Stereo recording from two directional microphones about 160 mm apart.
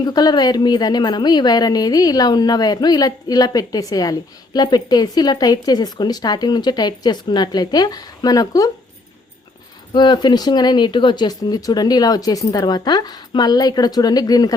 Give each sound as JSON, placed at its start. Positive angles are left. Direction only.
{"t": 0.0, "sound": "a woman's voice", "side_deg": 25}
{"t": 9.9, "sound": "a woman's voice", "side_deg": 30}